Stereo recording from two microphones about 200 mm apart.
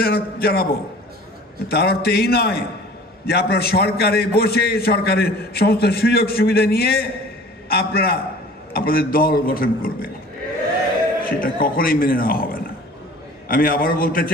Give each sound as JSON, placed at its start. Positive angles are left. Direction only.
{"t": 0.0, "sound": "a man's voice", "side_deg": 50}
{"t": 11.2, "sound": "a man's voice", "side_deg": 45}